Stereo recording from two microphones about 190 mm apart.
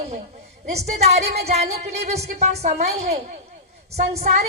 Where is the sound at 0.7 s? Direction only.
35° right (ahead or behind).